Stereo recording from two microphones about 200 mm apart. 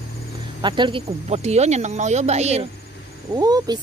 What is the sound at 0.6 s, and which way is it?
Speech, 25° right (ahead or behind).